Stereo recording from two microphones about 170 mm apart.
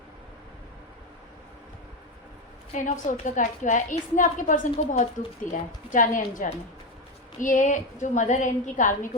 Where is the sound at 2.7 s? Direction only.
45° left (ahead or behind).